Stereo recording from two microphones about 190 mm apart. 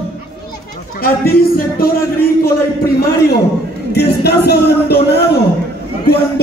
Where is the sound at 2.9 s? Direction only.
55° left (ahead or behind).